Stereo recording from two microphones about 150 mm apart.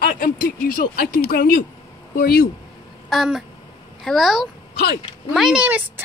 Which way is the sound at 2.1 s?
90° left.